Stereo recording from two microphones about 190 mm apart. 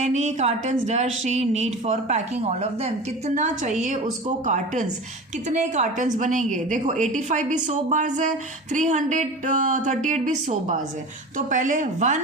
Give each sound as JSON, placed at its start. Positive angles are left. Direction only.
{"t": 0.0, "sound": "a woman's voice", "side_deg": -35}